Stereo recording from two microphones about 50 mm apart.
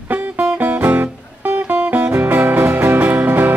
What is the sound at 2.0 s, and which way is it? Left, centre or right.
Music, right.